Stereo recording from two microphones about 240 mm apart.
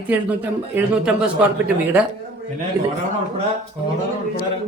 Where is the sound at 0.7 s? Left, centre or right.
Centre.